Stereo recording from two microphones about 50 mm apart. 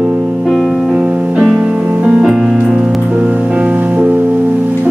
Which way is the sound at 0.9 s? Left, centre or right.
Right.